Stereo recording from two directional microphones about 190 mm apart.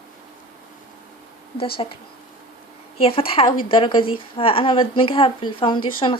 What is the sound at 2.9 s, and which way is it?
Speech, 30° left (ahead or behind).